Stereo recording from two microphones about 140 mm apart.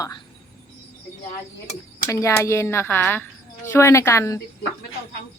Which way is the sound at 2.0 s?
20° left (ahead or behind).